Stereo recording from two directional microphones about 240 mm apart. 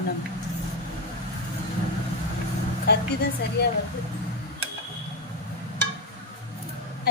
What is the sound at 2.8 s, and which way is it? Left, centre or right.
Speech, left.